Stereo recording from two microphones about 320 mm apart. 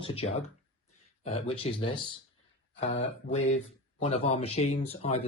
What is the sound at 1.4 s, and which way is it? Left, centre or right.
Speech, centre.